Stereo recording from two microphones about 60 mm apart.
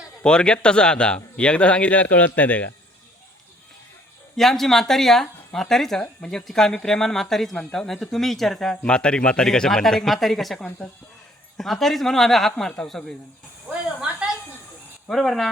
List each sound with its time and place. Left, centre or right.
0.3 s speech: centre
4.4 s a woman's voice: centre
8.8 s a woman's voice: centre
15.1 s a woman's voice: centre